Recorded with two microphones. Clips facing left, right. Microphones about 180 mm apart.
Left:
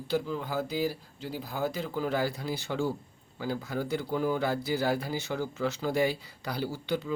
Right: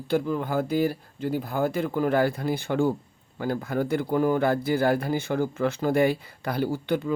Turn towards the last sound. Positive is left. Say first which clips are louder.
# right 6 dB
turn(degrees=-55)  # may be behind; listen again after turning